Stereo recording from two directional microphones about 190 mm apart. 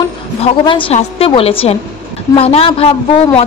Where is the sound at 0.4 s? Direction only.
25° left (ahead or behind).